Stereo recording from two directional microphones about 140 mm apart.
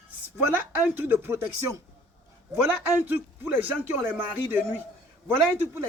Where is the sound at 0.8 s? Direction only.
15° right (ahead or behind).